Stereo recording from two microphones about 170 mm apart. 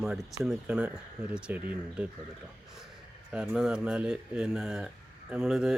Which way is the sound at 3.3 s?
5° right (ahead or behind).